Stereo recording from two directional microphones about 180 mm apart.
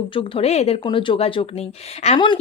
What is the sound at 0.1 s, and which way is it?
Speech, 30° left (ahead or behind).